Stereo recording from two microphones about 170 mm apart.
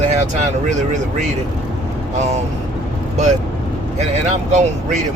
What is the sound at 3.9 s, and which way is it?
Speech, 40° right (ahead or behind).